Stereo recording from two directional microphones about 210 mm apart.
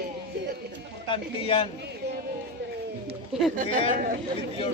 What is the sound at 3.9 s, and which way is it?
Speech, 40° right (ahead or behind).